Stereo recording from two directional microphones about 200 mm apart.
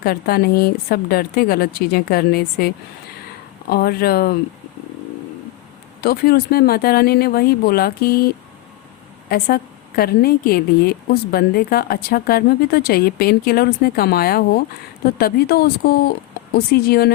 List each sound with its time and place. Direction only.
0.0 s a woman's voice: 50° left (ahead or behind)
6.0 s a woman's voice: 50° left (ahead or behind)
9.3 s a woman's voice: 50° left (ahead or behind)